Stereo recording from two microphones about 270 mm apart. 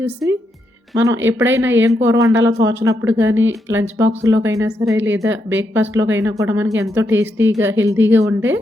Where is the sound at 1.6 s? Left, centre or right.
Right.